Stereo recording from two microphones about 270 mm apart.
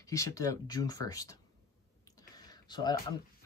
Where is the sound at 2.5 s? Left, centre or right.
Centre.